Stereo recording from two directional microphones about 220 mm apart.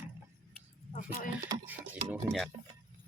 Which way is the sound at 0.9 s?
35° left (ahead or behind).